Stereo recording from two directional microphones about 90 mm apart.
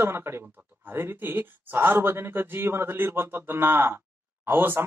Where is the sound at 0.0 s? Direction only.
25° right (ahead or behind).